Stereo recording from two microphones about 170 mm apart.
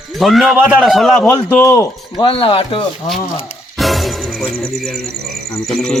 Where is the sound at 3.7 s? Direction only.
Centre (ahead or behind).